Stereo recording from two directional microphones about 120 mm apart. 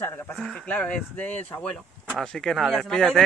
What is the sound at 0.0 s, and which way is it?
Sheep, 15° left (ahead or behind).